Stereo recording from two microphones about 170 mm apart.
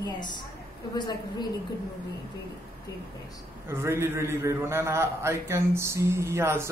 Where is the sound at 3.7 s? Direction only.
15° right (ahead or behind).